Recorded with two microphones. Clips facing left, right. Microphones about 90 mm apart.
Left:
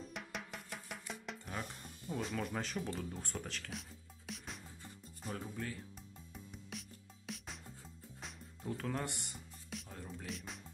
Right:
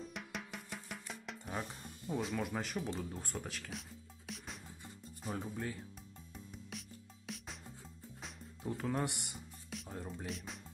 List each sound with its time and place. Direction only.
0.1 s music: centre (ahead or behind)
1.5 s speech: 15° right (ahead or behind)
4.3 s music: centre (ahead or behind)
5.3 s speech: 20° right (ahead or behind)
6.3 s music: centre (ahead or behind)
8.6 s speech: 10° right (ahead or behind)
9.8 s music: 20° right (ahead or behind)
10.2 s speech: centre (ahead or behind)